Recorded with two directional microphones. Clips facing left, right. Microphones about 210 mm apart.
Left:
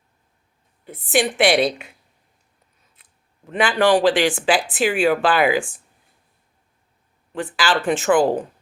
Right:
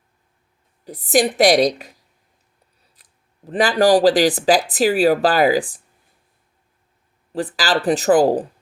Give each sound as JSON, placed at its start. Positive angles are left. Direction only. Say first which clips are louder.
{"t": 0.9, "sound": "speech", "louder": "right 3 dB", "side_deg": -35}
{"t": 7.3, "sound": "speech", "louder": "right 1 dB", "side_deg": -35}